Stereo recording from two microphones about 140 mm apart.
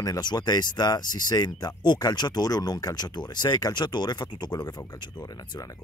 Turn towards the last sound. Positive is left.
turn(degrees=30)  # may be behind; listen again after turning